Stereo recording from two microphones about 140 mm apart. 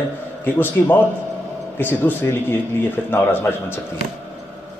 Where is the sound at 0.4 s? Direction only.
15° left (ahead or behind).